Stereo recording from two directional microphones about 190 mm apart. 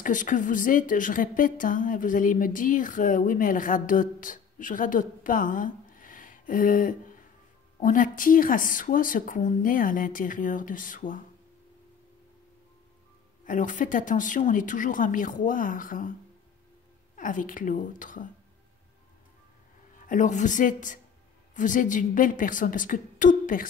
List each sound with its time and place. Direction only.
0.0 s a woman's voice: 45° left (ahead or behind)
13.5 s a woman's voice: 45° left (ahead or behind)
20.1 s a woman's voice: 40° left (ahead or behind)